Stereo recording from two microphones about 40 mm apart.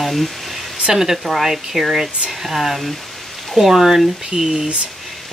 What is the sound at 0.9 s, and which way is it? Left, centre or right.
Speech, centre.